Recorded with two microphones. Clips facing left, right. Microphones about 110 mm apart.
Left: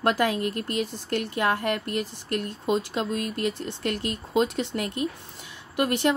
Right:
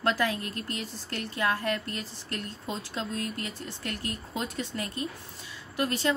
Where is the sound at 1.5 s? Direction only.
60° left (ahead or behind).